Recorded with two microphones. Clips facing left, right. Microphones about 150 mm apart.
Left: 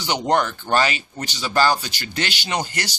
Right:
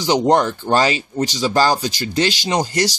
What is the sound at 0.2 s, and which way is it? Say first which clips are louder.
Speech: right 5 dB; 30° right (ahead or behind).